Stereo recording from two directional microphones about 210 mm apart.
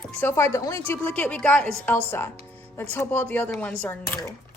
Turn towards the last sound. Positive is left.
turn(degrees=15)  # may be behind; listen again after turning